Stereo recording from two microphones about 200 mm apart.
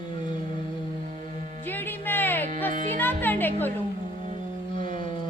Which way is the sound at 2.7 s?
40° right (ahead or behind).